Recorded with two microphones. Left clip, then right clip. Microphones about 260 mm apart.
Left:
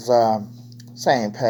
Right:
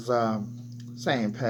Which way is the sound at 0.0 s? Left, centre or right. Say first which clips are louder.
Left 9 dB; centre.